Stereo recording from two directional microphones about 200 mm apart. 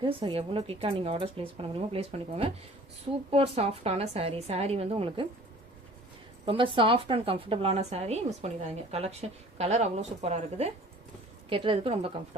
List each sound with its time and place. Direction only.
0.0 s a woman's voice: 25° right (ahead or behind)
6.4 s a woman's voice: 25° right (ahead or behind)